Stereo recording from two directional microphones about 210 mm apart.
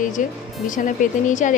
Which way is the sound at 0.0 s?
40° left (ahead or behind).